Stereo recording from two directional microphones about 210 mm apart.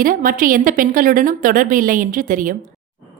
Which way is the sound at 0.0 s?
40° right (ahead or behind).